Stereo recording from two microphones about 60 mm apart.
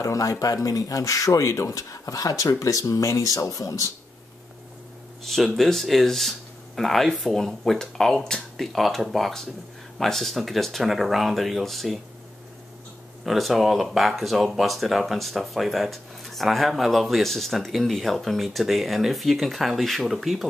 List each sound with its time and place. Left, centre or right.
0.0 s speech: left
5.2 s speech: centre
13.2 s speech: centre